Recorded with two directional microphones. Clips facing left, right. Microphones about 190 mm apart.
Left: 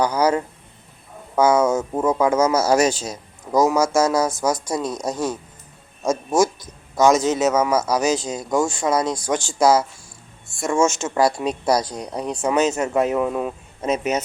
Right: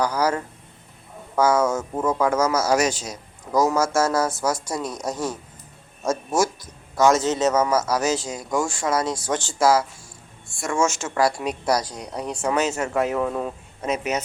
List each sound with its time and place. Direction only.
0.0 s speech: 20° left (ahead or behind)
13.8 s speech: 25° left (ahead or behind)